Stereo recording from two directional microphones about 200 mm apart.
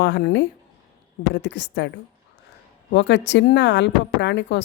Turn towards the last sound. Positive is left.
turn(degrees=60)  # may be behind; listen again after turning